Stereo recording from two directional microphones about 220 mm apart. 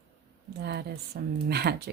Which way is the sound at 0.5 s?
50° right (ahead or behind).